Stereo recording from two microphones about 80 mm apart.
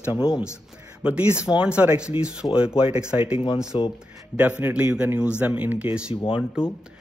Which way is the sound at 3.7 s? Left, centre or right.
Left.